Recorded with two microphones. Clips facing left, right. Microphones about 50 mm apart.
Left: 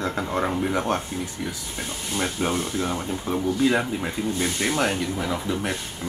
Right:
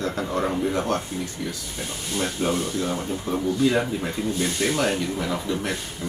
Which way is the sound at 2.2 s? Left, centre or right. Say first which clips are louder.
Right 1 dB; centre.